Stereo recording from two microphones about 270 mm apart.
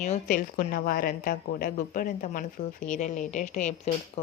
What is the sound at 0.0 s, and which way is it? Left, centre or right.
A woman's voice, left.